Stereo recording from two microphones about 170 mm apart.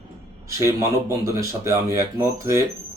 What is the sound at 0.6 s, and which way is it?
Speech, 15° right (ahead or behind).